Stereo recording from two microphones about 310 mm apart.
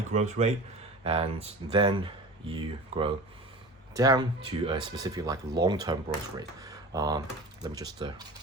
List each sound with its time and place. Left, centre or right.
0.1 s speech: right